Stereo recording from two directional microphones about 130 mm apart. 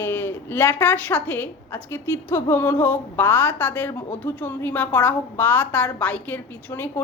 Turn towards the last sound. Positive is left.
turn(degrees=15)  # may be behind; listen again after turning